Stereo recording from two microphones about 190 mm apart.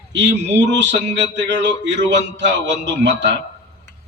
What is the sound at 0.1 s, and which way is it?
A man's voice, 70° right (ahead or behind).